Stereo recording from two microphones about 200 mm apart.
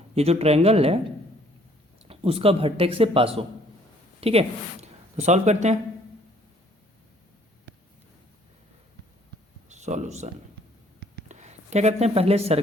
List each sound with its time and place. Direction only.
0.1 s speech: 30° right (ahead or behind)
2.0 s speech: 30° right (ahead or behind)
9.6 s speech: 35° right (ahead or behind)
11.0 s a sound: 35° right (ahead or behind)